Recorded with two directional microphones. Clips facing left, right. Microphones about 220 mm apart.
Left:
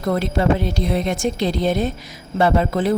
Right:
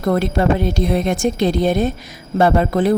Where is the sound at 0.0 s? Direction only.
50° right (ahead or behind).